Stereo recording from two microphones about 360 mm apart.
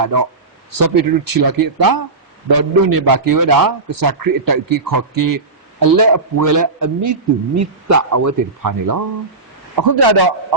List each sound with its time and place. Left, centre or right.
0.0 s a man's voice: right
9.7 s a man's voice: right